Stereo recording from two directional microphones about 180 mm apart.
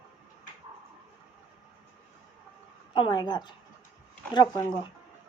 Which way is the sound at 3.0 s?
25° left (ahead or behind).